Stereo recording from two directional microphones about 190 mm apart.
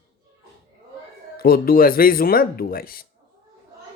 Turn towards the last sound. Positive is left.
turn(degrees=50)  # may be behind; listen again after turning